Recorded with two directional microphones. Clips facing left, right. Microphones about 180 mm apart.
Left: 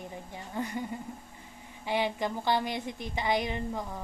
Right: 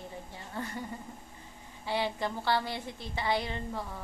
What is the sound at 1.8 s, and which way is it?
A woman's voice, 15° left (ahead or behind).